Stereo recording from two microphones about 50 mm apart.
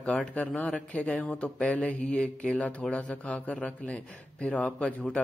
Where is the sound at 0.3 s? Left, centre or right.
Left.